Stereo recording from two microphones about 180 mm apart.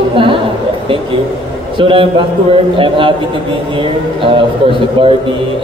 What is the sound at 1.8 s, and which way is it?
A man's voice, 30° right (ahead or behind).